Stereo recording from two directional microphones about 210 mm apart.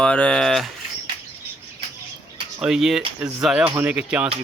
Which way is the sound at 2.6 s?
Centre (ahead or behind).